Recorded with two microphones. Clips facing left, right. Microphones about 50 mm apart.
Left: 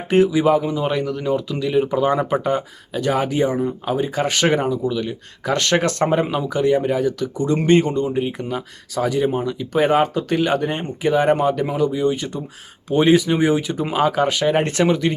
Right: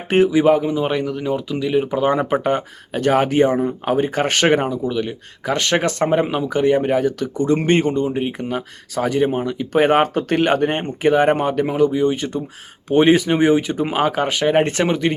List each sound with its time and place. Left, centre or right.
0.1 s speech: right; by 2.0 s centre
2.0 s speech: right
6.5 s speech: right